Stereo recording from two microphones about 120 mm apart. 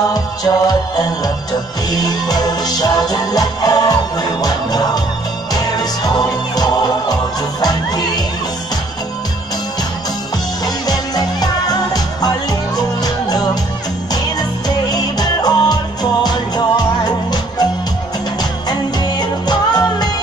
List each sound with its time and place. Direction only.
0.1 s music: 30° left (ahead or behind)
10.6 s music: 35° left (ahead or behind)
14.9 s music: 35° left (ahead or behind)